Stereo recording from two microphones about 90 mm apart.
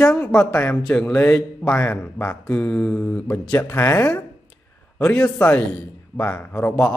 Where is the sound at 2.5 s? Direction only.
15° left (ahead or behind).